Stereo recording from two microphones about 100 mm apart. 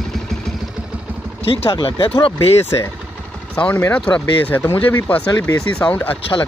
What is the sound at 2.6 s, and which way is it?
Speech, 25° left (ahead or behind).